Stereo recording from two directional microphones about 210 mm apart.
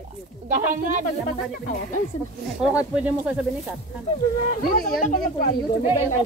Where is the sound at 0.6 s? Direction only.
40° right (ahead or behind).